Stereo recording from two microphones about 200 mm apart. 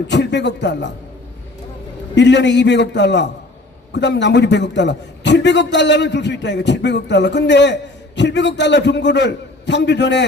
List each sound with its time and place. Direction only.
0.1 s a man's voice: 60° left (ahead or behind)
2.1 s a man's voice: 60° left (ahead or behind)